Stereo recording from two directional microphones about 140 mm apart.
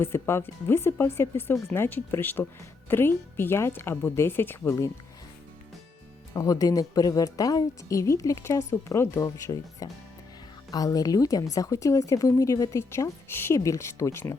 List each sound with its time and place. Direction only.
0.0 s speech: 20° left (ahead or behind)
6.3 s speech: 25° left (ahead or behind)